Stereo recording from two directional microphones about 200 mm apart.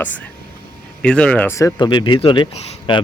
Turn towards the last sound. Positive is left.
turn(degrees=25)  # may be behind; listen again after turning